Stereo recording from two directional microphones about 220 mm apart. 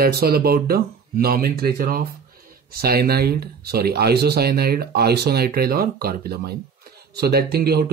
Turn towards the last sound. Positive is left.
turn(degrees=-45)  # may be behind; listen again after turning